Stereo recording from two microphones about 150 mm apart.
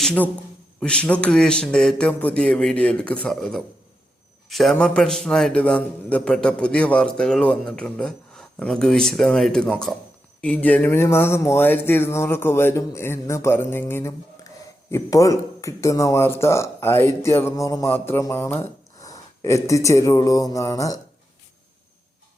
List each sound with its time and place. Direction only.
0.0 s a man's voice: 10° left (ahead or behind)